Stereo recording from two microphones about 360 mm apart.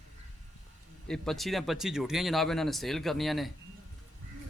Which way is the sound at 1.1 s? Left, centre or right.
Centre.